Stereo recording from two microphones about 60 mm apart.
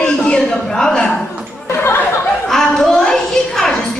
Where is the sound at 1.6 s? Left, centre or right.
Left.